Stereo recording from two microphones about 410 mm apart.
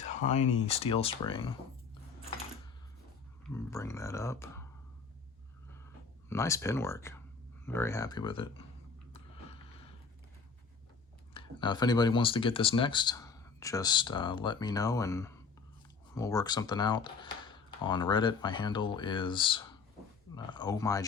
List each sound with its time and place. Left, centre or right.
0.2 s speech: centre
3.5 s speech: centre
5.8 s speech: centre
11.3 s speech: centre